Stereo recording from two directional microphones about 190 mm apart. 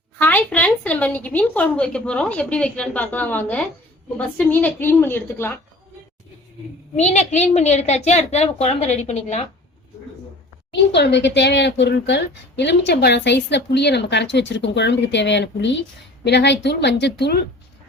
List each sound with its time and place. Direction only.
0.2 s a woman's voice: 10° left (ahead or behind)
6.9 s a woman's voice: 35° left (ahead or behind)
10.7 s speech: 65° left (ahead or behind)